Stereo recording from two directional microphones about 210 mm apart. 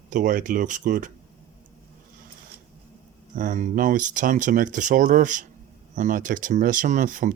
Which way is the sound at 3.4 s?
35° right (ahead or behind).